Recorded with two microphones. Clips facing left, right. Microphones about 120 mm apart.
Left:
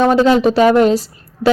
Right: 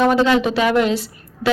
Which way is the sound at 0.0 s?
40° left (ahead or behind).